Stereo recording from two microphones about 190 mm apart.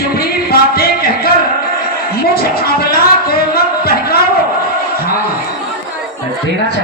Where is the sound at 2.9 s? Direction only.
55° left (ahead or behind).